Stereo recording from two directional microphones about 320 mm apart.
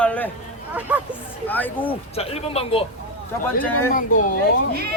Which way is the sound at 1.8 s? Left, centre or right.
Centre.